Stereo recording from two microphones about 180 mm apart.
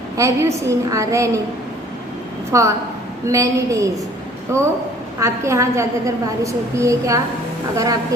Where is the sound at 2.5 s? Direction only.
15° right (ahead or behind).